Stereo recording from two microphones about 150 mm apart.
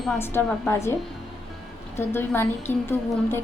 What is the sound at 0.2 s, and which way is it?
Speech, 15° left (ahead or behind).